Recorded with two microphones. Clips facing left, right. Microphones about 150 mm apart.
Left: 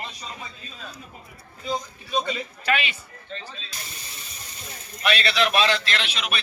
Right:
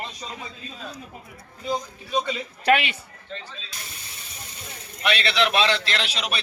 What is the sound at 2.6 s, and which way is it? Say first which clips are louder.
Speech: right 5 dB; 65° right (ahead or behind).